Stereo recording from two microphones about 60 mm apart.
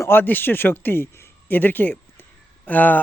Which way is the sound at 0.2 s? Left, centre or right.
Left.